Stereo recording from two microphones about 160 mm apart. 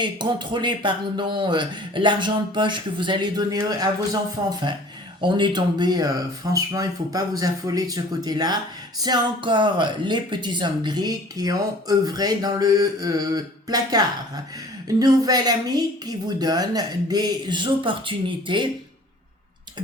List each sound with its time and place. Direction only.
0.0 s speech: 30° right (ahead or behind)